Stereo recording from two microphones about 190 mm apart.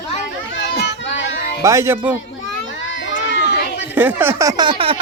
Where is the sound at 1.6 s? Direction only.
15° right (ahead or behind).